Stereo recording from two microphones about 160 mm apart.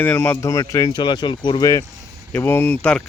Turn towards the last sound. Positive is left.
turn(degrees=10)  # may be behind; listen again after turning